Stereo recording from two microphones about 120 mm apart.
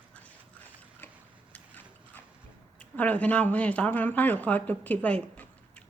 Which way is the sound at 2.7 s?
10° left (ahead or behind).